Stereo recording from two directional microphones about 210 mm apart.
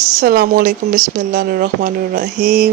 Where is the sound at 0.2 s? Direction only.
45° right (ahead or behind).